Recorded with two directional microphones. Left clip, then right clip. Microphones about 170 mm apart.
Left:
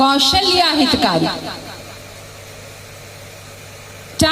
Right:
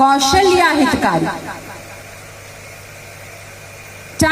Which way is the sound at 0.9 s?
40° left (ahead or behind).